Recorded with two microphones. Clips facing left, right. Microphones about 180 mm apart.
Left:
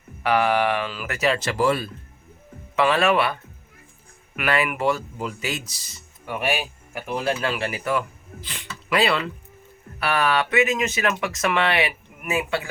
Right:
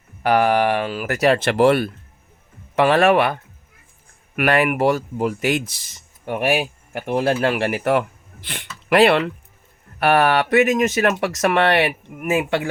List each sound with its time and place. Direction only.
0.2 s speech: 45° right (ahead or behind); by 1.9 s 65° right (ahead or behind)
2.7 s speech: 45° right (ahead or behind)